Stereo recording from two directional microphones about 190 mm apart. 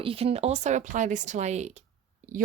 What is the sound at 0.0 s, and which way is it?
Speech, 30° right (ahead or behind).